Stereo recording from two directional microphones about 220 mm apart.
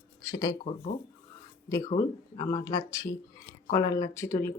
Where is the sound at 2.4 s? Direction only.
15° left (ahead or behind).